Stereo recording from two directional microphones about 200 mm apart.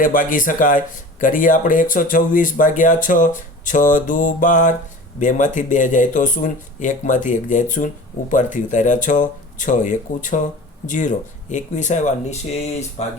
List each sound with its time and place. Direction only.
0.0 s a man's voice: 40° left (ahead or behind)